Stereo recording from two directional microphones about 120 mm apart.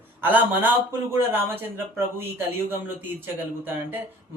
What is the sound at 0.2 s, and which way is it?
Speech, 15° right (ahead or behind).